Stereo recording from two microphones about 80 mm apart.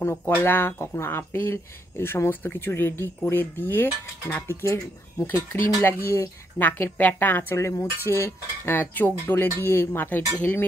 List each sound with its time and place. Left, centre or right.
0.3 s speech: left
4.5 s speech: left
6.6 s speech: left